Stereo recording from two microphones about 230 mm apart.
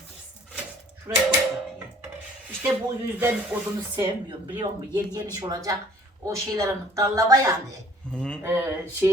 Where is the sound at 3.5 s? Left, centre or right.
Centre.